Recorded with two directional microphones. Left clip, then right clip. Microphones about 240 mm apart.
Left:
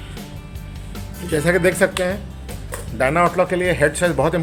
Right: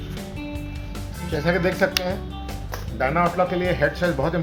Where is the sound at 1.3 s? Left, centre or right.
Left.